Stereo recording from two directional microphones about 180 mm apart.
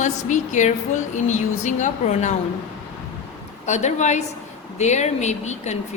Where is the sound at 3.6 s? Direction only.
40° left (ahead or behind).